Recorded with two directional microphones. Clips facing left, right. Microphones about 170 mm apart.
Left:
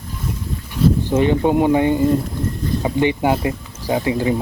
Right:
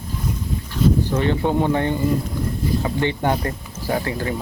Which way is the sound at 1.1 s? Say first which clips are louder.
Left 4 dB; 15° left (ahead or behind).